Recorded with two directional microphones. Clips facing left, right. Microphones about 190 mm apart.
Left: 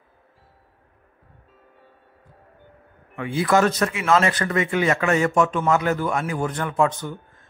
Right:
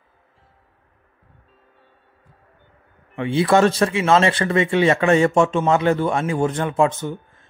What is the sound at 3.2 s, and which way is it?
Speech, 25° right (ahead or behind).